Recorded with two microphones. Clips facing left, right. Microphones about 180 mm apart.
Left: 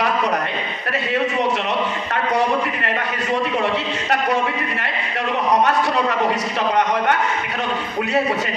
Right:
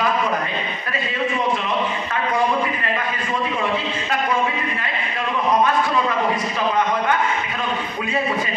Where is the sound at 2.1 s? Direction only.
65° left (ahead or behind).